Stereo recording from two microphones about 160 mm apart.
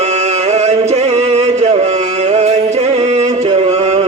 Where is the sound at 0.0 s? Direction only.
45° right (ahead or behind).